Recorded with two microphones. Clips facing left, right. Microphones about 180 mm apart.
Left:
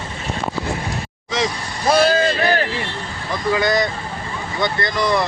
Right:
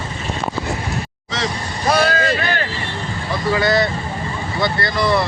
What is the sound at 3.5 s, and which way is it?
Speech, 15° left (ahead or behind).